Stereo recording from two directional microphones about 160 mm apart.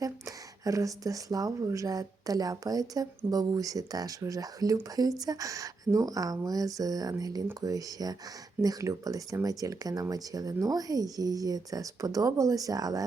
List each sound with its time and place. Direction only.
0.0 s speech: 20° right (ahead or behind)